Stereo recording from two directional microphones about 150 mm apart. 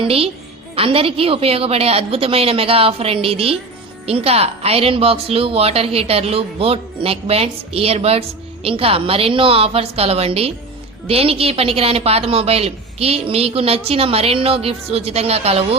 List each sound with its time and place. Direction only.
0.0 s a woman's voice: 40° right (ahead or behind)